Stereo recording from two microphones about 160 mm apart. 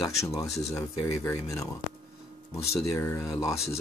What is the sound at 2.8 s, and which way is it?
Speech, 20° left (ahead or behind).